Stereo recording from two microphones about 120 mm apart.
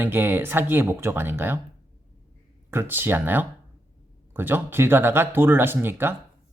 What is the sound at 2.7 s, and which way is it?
Speech, 20° right (ahead or behind).